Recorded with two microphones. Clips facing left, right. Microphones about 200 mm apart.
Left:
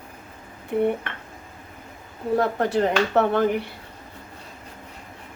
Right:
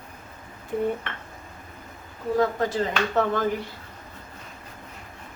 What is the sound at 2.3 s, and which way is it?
Speech, 65° left (ahead or behind).